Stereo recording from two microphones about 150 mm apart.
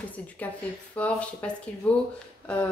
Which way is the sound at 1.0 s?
10° left (ahead or behind).